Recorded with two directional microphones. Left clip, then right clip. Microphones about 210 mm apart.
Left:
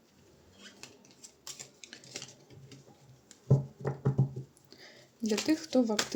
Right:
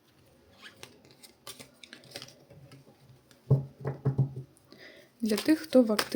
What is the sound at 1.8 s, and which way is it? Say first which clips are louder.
Typing: right 1 dB; 10° right (ahead or behind).